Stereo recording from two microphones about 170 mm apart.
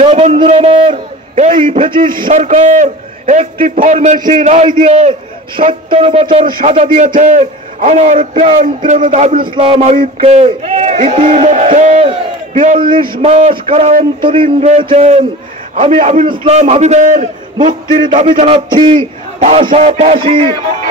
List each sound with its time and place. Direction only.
0.0 s a sound: 40° right (ahead or behind)
1.9 s a man's voice: 30° right (ahead or behind)
2.2 s a man's voice: 45° right (ahead or behind)
4.6 s a man's voice: 30° right (ahead or behind)
6.4 s a man's voice: 45° right (ahead or behind)
9.4 s a man's voice: 35° right (ahead or behind)
12.8 s a man's voice: 30° right (ahead or behind)
13.2 s a man's voice: 40° right (ahead or behind)
14.2 s a man's voice: 30° right (ahead or behind)
17.6 s a man's voice: 25° right (ahead or behind)